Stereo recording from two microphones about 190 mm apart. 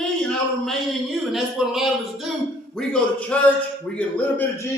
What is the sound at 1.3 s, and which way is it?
A man's voice, centre (ahead or behind).